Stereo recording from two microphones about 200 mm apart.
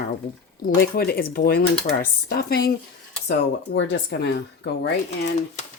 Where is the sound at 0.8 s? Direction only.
50° left (ahead or behind).